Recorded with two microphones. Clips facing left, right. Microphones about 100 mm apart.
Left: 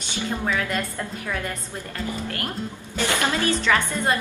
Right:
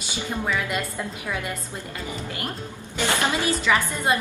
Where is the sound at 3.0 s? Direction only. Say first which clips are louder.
Even; 20° right (ahead or behind).